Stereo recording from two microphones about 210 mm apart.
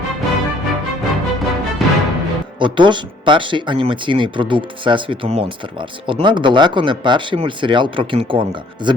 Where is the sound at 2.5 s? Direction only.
25° right (ahead or behind).